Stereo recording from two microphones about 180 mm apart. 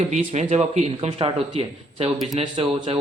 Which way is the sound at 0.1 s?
40° right (ahead or behind).